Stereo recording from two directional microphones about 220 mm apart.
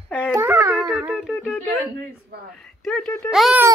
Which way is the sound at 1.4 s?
10° left (ahead or behind).